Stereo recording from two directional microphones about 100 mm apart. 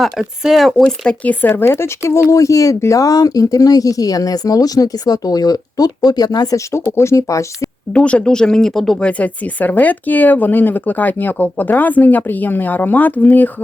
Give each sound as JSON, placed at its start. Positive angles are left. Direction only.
{"t": 0.0, "sound": "speech", "side_deg": -5}
{"t": 6.9, "sound": "speech", "side_deg": 30}
{"t": 7.9, "sound": "speech", "side_deg": 10}